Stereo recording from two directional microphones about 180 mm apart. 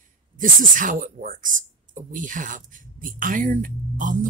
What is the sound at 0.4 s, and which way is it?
Speech, 50° right (ahead or behind).